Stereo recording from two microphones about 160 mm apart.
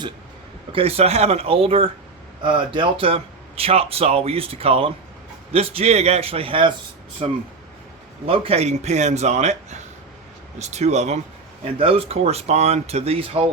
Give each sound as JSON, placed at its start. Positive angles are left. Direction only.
{"t": 0.7, "sound": "a man's voice", "side_deg": -35}